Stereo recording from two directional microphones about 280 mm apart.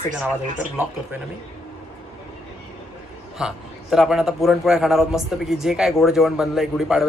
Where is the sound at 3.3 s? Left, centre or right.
Centre.